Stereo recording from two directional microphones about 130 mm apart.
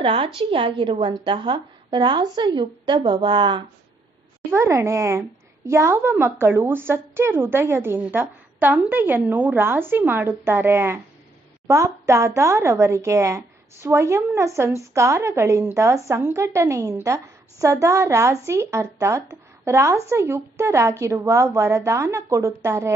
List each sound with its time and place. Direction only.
0.0 s a woman's voice: 45° right (ahead or behind)
4.5 s a woman's voice: 20° right (ahead or behind)